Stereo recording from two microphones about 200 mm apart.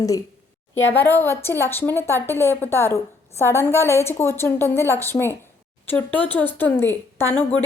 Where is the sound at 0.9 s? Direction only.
10° left (ahead or behind).